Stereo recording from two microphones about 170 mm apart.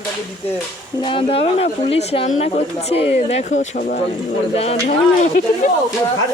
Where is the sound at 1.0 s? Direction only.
30° left (ahead or behind); by 4.0 s 50° left (ahead or behind).